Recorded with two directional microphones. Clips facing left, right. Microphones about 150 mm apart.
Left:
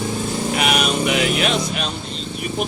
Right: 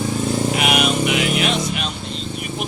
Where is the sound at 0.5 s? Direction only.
40° left (ahead or behind).